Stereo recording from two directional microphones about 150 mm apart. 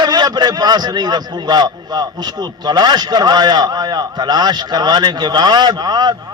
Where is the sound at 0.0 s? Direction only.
30° right (ahead or behind).